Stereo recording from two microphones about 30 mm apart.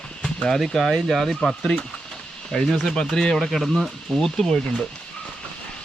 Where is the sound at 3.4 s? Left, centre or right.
Centre.